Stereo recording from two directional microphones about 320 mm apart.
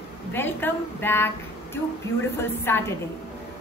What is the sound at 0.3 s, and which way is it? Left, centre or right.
A woman's voice, centre.